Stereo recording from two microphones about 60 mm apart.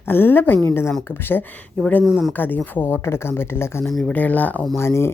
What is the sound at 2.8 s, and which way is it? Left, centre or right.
Speech, left.